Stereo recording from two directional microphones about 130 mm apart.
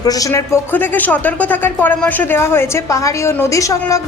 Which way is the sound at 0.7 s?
15° left (ahead or behind).